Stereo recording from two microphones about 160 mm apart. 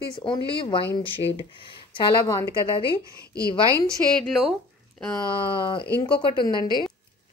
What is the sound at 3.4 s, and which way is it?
Speech, 20° right (ahead or behind).